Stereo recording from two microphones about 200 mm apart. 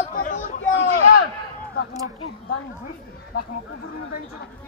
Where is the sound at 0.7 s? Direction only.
50° left (ahead or behind).